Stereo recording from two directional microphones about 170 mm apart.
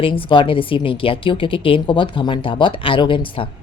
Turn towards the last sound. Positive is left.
turn(degrees=30)  # may be behind; listen again after turning